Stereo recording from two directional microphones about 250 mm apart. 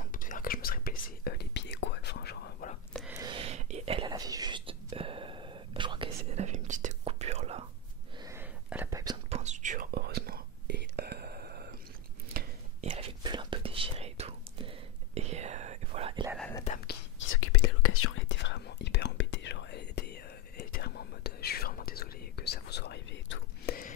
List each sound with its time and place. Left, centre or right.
0.0 s whispering: left
2.9 s whispering: centre
3.2 s whispering: centre
8.2 s whispering: centre; by 12.5 s right
12.8 s whispering: right
16.3 s whispering: centre
16.6 s whispering: left
17.3 s whispering: left